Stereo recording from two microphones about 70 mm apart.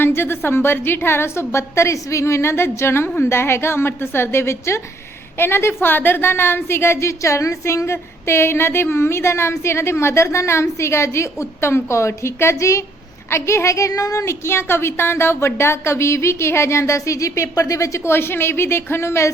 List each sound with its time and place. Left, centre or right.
0.0 s a woman's voice: left